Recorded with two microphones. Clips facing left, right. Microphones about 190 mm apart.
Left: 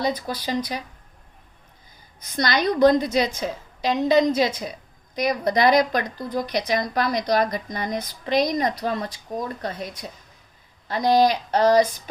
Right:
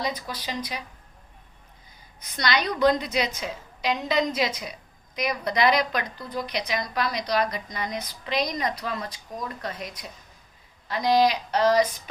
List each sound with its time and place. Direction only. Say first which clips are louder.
0.0 s speech: left 5 dB; 35° left (ahead or behind)
2.3 s a woman's voice: left 4 dB; 45° left (ahead or behind)
9.0 s speech: left 5 dB; 25° left (ahead or behind)
10.8 s a woman's voice: left 3 dB; 45° left (ahead or behind)